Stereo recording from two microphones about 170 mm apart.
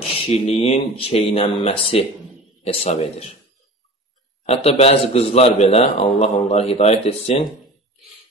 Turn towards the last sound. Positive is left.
turn(degrees=35)  # may be behind; listen again after turning